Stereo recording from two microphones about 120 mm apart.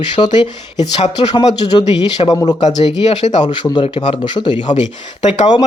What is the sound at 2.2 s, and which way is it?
Speech, 30° left (ahead or behind).